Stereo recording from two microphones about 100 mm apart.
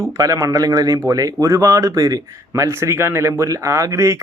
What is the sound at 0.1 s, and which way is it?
Speech, 35° right (ahead or behind).